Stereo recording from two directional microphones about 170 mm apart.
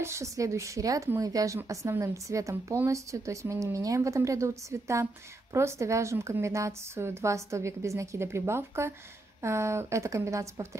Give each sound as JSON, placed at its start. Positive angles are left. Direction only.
{"t": 0.0, "sound": "a woman's voice", "side_deg": -15}